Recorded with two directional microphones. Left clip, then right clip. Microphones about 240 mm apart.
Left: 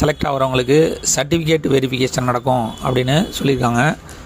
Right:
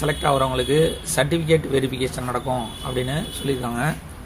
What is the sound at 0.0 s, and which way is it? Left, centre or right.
Speech, left.